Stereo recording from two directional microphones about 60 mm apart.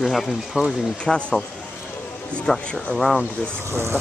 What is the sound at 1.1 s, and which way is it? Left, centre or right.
Speech, centre.